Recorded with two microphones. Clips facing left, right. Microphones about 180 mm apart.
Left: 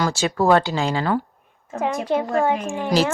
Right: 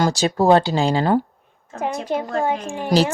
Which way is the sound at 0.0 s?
35° right (ahead or behind).